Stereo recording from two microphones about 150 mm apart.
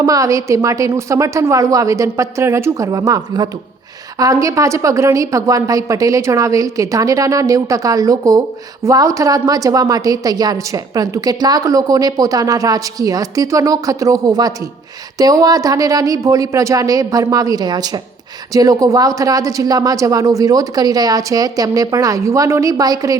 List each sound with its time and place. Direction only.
0.0 s a woman's voice: 20° right (ahead or behind)